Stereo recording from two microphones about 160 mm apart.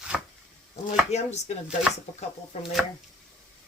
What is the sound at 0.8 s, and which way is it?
Speech, 45° left (ahead or behind).